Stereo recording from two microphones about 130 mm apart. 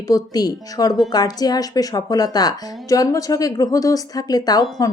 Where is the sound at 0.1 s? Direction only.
30° left (ahead or behind).